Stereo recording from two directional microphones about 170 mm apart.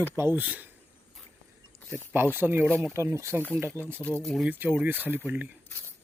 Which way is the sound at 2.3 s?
10° right (ahead or behind).